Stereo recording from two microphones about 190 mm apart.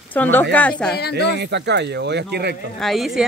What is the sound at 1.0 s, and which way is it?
Speech, 60° left (ahead or behind).